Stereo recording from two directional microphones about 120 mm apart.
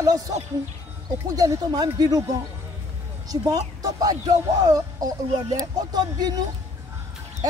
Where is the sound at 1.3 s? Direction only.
30° right (ahead or behind).